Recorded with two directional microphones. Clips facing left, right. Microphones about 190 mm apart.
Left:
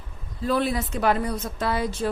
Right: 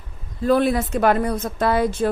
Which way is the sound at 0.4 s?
55° right (ahead or behind).